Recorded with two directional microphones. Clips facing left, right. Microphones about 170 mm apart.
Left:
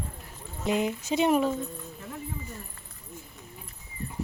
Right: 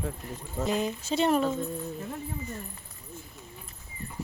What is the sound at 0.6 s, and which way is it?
Speech, 20° left (ahead or behind).